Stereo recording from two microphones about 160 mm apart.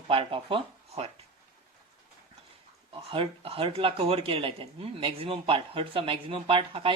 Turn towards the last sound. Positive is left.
turn(degrees=-35)  # may be behind; listen again after turning